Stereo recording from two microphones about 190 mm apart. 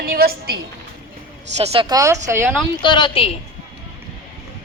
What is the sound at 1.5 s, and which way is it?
Speech, 30° right (ahead or behind).